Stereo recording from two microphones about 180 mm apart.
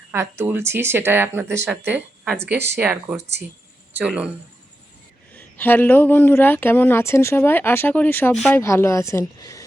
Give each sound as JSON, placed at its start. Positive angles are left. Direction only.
{"t": 0.1, "sound": "speech", "side_deg": -15}
{"t": 5.3, "sound": "speech", "side_deg": 10}
{"t": 8.5, "sound": "speech", "side_deg": 15}